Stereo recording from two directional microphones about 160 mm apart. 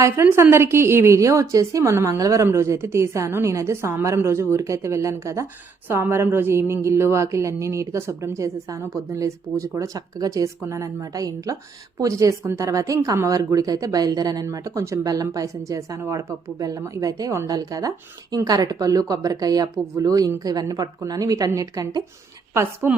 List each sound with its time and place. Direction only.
0.0 s a woman's voice: 15° right (ahead or behind)